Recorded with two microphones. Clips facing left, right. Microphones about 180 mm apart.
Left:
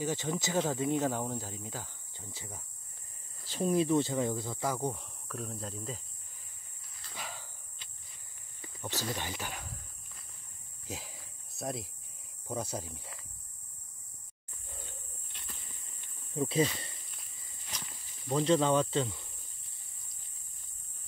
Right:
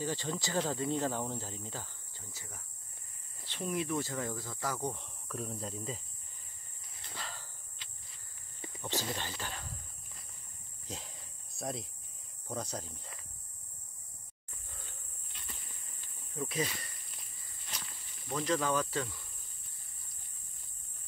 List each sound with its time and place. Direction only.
0.0 s speech: 15° left (ahead or behind)
2.3 s speech: 25° left (ahead or behind)
4.9 s speech: centre (ahead or behind)
7.2 s a sound: 15° left (ahead or behind)
9.1 s speech: 10° left (ahead or behind)
10.9 s cricket: 5° left (ahead or behind)
12.4 s speech: 10° left (ahead or behind)
16.3 s speech: 30° left (ahead or behind)
18.3 s speech: 30° left (ahead or behind)